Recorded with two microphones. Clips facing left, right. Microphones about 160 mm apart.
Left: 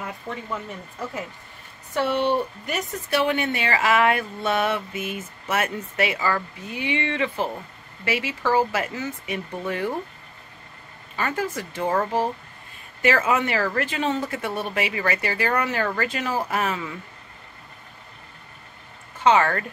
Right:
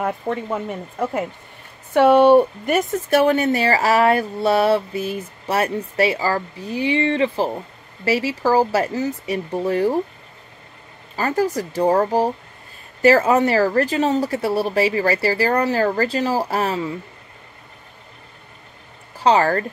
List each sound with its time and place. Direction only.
0.3 s speech: 55° right (ahead or behind); by 9.9 s 35° right (ahead or behind)
11.1 s speech: 35° right (ahead or behind)
19.1 s speech: 35° right (ahead or behind)